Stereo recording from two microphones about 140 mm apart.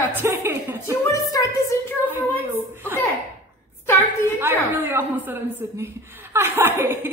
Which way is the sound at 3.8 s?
15° left (ahead or behind).